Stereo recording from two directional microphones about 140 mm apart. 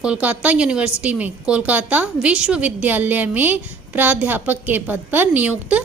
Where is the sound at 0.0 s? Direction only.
10° right (ahead or behind).